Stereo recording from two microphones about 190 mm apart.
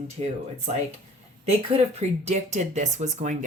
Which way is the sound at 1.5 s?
35° right (ahead or behind).